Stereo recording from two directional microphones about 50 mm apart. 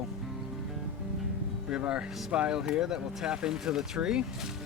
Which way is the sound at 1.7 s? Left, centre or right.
Centre.